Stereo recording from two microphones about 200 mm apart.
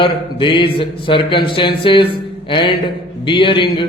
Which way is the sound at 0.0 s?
25° left (ahead or behind).